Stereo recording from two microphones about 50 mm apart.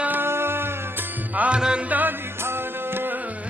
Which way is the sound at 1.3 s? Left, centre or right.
Right.